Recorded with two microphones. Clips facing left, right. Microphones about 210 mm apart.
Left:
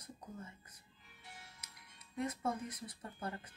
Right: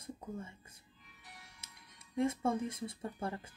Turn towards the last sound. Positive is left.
turn(degrees=-25)  # may be behind; listen again after turning